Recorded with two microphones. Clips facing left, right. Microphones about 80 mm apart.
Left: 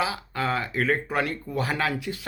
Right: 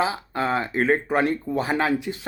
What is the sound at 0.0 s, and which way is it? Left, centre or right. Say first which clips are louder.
Speech: right 3 dB; right.